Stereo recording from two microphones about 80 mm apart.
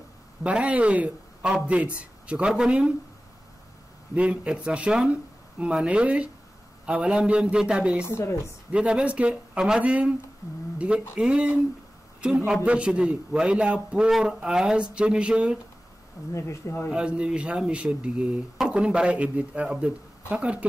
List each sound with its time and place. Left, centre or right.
0.4 s speech: centre
4.1 s speech: centre
8.0 s a woman's voice: left
8.7 s speech: centre
11.1 s speech: centre
16.3 s a woman's voice: left
16.9 s speech: centre